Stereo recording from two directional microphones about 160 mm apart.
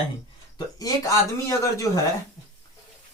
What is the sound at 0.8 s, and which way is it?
A man's voice, 20° left (ahead or behind).